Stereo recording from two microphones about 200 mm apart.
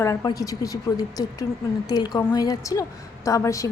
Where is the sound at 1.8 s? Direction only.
20° left (ahead or behind).